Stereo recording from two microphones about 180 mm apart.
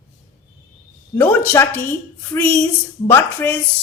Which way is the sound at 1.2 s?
10° left (ahead or behind).